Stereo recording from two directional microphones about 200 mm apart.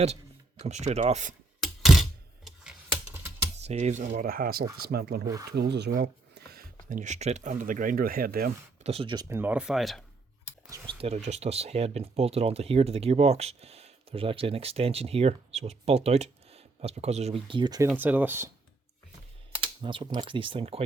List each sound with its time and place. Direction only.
0.6 s speech: 35° right (ahead or behind)
1.6 s typewriter: centre (ahead or behind)
3.6 s speech: 35° right (ahead or behind)
4.2 s speech: 45° right (ahead or behind)
8.8 s speech: 30° right (ahead or behind)
9.3 s speech: 10° right (ahead or behind)
10.7 s speech: 25° right (ahead or behind)
17.8 s speech: 10° right (ahead or behind)
19.5 s speech: 25° right (ahead or behind)